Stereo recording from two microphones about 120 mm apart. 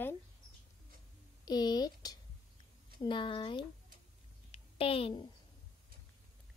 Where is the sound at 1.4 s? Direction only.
35° left (ahead or behind).